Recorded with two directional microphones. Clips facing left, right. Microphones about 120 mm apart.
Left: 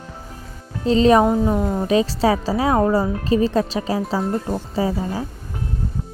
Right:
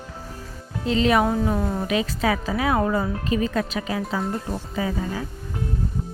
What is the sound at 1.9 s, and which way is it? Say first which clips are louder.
Speech: left 7 dB; 35° left (ahead or behind).